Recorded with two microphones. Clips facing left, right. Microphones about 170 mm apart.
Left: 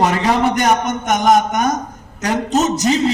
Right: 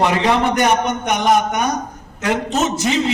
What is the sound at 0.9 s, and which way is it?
A man's voice, 45° left (ahead or behind).